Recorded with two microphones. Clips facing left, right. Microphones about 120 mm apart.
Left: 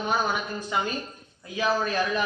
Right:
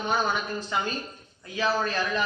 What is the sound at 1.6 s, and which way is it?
Speech, 15° left (ahead or behind).